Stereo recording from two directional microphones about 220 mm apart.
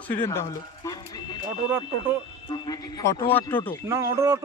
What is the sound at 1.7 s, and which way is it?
Speech, 10° right (ahead or behind).